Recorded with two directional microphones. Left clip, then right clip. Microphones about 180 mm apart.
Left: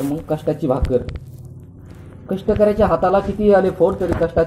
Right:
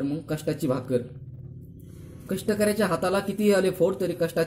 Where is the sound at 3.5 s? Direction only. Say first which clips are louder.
Left 8 dB; 60° right (ahead or behind).